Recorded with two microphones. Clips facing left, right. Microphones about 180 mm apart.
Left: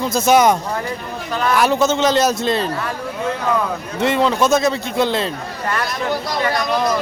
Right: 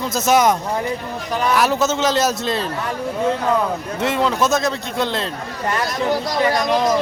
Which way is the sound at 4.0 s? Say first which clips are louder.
Left 3 dB; centre (ahead or behind).